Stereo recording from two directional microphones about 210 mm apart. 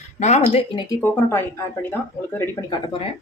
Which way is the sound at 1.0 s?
10° left (ahead or behind).